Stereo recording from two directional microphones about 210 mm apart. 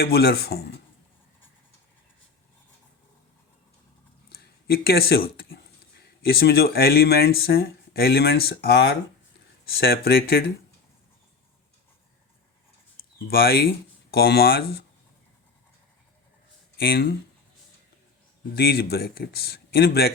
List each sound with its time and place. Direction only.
0.0 s speech: 45° left (ahead or behind)
4.3 s speech: 45° left (ahead or behind)
13.1 s speech: 45° left (ahead or behind)
16.7 s speech: 45° left (ahead or behind)
18.5 s speech: 50° left (ahead or behind)